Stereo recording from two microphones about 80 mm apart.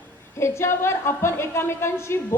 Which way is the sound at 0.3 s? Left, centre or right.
Left.